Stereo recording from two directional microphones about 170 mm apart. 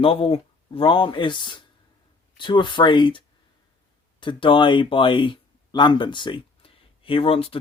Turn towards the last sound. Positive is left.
turn(degrees=35)  # may be behind; listen again after turning